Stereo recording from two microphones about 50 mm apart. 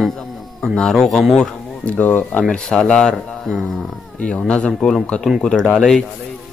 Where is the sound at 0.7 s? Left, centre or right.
Centre.